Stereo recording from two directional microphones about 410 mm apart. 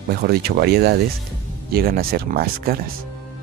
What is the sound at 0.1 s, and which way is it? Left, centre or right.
Speech, right.